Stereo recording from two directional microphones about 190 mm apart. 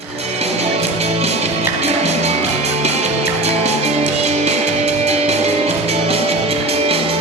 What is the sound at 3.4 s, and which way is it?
Music, 35° right (ahead or behind).